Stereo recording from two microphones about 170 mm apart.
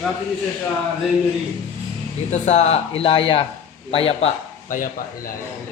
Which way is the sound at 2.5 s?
40° left (ahead or behind).